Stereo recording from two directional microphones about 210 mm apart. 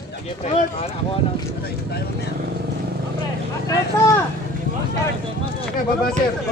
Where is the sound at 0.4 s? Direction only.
30° left (ahead or behind).